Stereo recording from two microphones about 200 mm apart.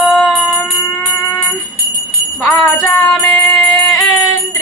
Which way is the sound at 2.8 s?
10° left (ahead or behind).